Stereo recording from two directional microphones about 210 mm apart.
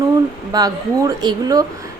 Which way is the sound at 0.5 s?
20° right (ahead or behind).